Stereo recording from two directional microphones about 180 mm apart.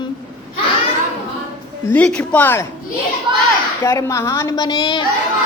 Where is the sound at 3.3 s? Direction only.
25° right (ahead or behind).